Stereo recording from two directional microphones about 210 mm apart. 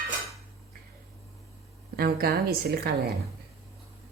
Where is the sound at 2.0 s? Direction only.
45° right (ahead or behind).